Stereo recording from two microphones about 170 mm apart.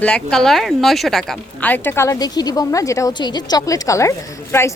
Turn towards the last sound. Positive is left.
turn(degrees=15)  # may be behind; listen again after turning